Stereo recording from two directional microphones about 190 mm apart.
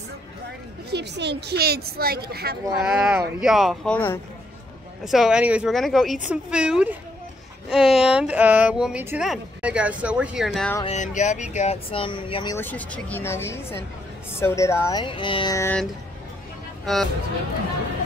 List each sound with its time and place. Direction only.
0.8 s a woman's voice: 60° right (ahead or behind)
2.8 s speech: 5° right (ahead or behind)
5.0 s speech: centre (ahead or behind)
10.8 s speech: 35° left (ahead or behind)
12.5 s speech: 10° left (ahead or behind)
16.8 s speech: centre (ahead or behind)